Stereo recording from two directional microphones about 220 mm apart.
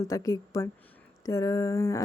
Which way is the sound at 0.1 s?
15° left (ahead or behind).